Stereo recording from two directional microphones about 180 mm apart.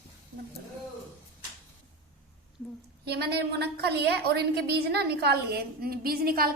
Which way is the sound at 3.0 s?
65° right (ahead or behind).